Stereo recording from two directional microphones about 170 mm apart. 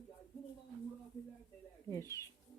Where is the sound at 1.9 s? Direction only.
15° left (ahead or behind).